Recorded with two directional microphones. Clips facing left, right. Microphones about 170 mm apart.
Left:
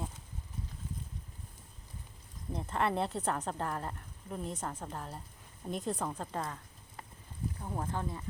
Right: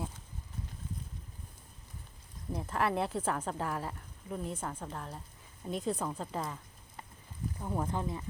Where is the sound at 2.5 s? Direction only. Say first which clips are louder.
Right 1 dB; 5° right (ahead or behind).